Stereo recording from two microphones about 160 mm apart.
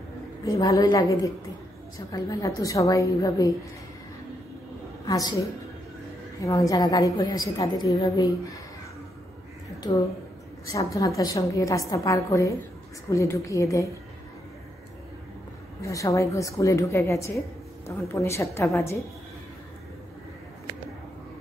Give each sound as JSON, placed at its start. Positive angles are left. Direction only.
{"t": 0.5, "sound": "a woman's voice", "side_deg": 20}
{"t": 5.0, "sound": "a woman's voice", "side_deg": 20}
{"t": 6.4, "sound": "a woman's voice", "side_deg": 20}
{"t": 10.7, "sound": "a woman's voice", "side_deg": 20}
{"t": 15.8, "sound": "a woman's voice", "side_deg": 20}